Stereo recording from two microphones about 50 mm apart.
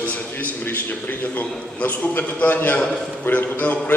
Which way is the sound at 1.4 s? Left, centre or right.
Left.